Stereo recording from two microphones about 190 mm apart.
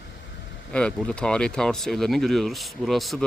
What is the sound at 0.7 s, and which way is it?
Speech, 5° left (ahead or behind).